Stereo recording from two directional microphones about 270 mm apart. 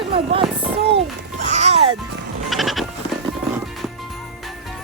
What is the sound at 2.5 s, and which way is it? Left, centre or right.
Music, centre.